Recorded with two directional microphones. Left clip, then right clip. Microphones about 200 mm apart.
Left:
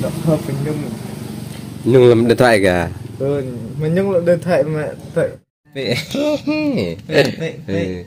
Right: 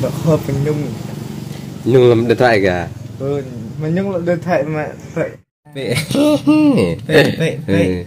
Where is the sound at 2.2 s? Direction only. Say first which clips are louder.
Even; 45° left (ahead or behind); by 2.9 s 60° left (ahead or behind).